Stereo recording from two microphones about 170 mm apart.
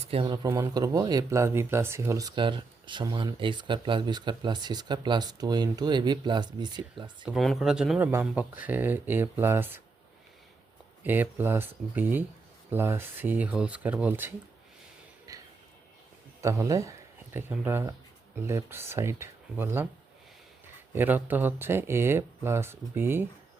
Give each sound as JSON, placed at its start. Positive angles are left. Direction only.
{"t": 0.1, "sound": "speech", "side_deg": -30}
{"t": 7.3, "sound": "speech", "side_deg": 0}
{"t": 11.0, "sound": "speech", "side_deg": -10}
{"t": 15.3, "sound": "a sound", "side_deg": -20}
{"t": 16.4, "sound": "speech", "side_deg": -15}
{"t": 20.9, "sound": "speech", "side_deg": -10}